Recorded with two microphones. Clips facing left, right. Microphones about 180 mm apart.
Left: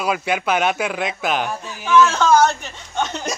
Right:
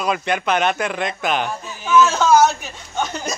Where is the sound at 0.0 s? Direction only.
5° left (ahead or behind).